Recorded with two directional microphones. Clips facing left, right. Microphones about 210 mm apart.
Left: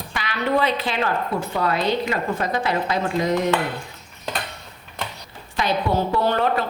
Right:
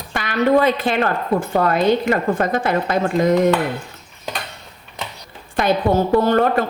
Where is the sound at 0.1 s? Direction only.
50° right (ahead or behind).